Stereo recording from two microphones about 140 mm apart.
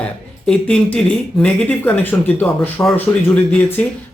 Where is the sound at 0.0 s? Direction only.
5° left (ahead or behind).